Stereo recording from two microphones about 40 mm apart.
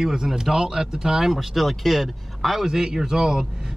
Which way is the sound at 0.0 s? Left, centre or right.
Centre.